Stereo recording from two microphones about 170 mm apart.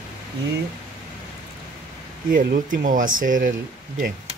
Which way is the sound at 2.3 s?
55° right (ahead or behind).